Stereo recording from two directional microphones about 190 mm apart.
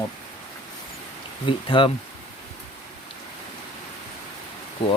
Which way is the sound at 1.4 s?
25° left (ahead or behind).